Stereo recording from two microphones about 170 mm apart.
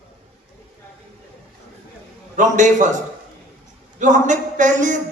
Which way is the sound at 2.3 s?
45° right (ahead or behind).